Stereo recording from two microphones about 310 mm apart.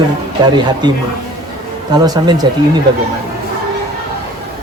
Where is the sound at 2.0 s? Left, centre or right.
Centre.